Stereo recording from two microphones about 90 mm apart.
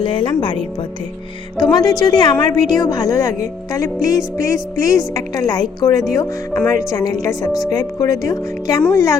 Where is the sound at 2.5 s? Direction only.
45° left (ahead or behind).